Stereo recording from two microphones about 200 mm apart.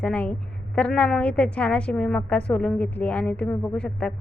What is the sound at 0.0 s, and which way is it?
A woman's voice, 5° left (ahead or behind).